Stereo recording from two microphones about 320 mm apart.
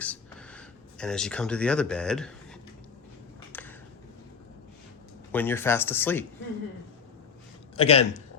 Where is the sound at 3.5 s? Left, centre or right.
Centre.